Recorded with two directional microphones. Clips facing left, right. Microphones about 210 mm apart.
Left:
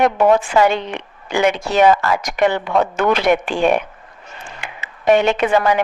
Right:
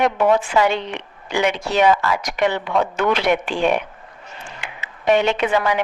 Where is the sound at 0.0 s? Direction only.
45° left (ahead or behind).